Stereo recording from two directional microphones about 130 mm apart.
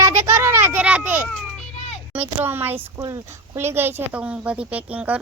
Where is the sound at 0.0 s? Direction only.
20° right (ahead or behind).